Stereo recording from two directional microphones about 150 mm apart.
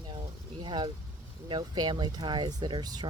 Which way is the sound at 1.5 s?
30° right (ahead or behind).